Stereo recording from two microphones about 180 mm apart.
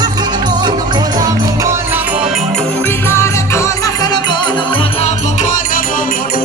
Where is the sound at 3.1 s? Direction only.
15° left (ahead or behind).